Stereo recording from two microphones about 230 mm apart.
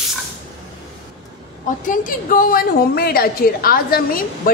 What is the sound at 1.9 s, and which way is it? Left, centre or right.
A woman's voice, left.